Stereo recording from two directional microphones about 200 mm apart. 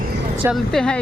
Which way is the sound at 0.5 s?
Centre (ahead or behind).